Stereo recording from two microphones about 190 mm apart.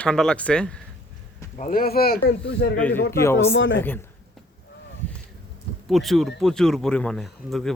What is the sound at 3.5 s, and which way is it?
Speech, 80° left.